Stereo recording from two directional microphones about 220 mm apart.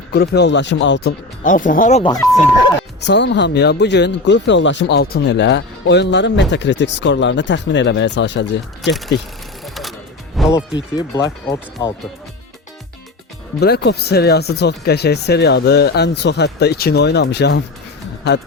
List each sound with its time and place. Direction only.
0.1 s speech: 50° left (ahead or behind)
1.5 s speech: 35° left (ahead or behind)
3.0 s speech: 50° left (ahead or behind)
9.6 s music: centre (ahead or behind)
10.9 s speech: 15° left (ahead or behind)
13.6 s speech: 50° left (ahead or behind)